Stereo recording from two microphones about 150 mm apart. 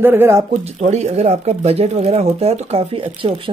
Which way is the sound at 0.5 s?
45° right (ahead or behind).